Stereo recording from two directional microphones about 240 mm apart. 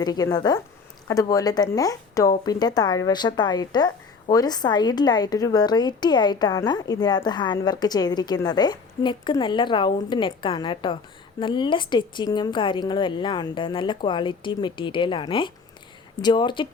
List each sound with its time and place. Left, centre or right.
0.0 s a woman's voice: centre